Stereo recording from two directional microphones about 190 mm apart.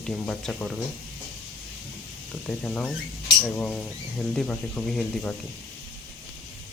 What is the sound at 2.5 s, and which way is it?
Speech, centre (ahead or behind).